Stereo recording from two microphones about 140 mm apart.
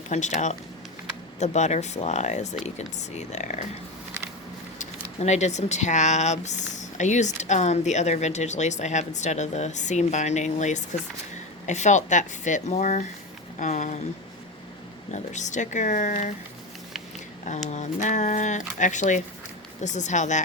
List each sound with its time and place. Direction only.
0.1 s speech: 60° left (ahead or behind)
4.8 s speech: 55° left (ahead or behind)
15.1 s speech: 60° left (ahead or behind)
17.7 s speech: 55° left (ahead or behind)